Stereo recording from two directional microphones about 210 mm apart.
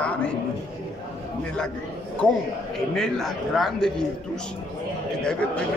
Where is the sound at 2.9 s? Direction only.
Centre (ahead or behind).